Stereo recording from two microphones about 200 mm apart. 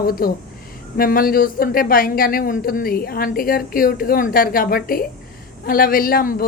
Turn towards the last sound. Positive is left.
turn(degrees=45)  # may be behind; listen again after turning